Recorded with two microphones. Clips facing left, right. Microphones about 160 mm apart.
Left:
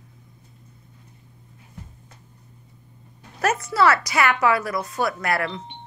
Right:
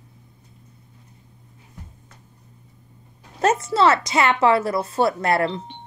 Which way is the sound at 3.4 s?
25° right (ahead or behind).